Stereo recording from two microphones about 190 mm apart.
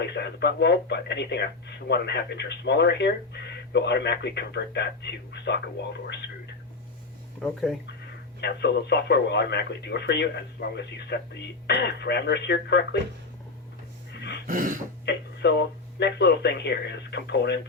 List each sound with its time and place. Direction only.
0.0 s speech: 60° left (ahead or behind)
8.4 s speech: 60° left (ahead or behind)
14.4 s dog: 45° right (ahead or behind)
15.0 s speech: 65° left (ahead or behind)